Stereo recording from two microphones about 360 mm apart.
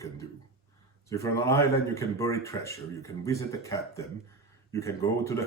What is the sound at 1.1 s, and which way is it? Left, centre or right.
A man's voice, centre.